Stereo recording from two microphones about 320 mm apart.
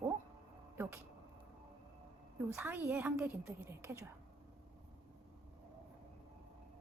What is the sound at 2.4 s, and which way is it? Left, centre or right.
A woman's voice, centre.